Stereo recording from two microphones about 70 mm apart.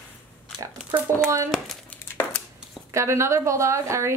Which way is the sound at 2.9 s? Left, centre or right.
Right.